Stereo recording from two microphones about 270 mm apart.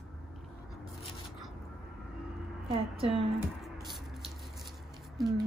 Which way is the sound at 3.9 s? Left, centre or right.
Centre.